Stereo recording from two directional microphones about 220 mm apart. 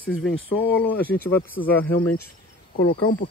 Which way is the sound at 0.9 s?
10° left (ahead or behind).